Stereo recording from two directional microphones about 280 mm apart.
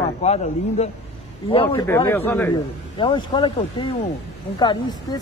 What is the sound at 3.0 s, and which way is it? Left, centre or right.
Speech, centre.